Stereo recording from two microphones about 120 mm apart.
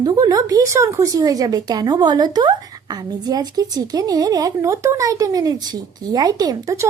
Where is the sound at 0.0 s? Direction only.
35° right (ahead or behind).